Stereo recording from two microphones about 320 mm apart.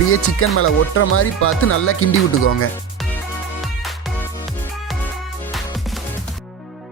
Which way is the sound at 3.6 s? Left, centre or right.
Centre.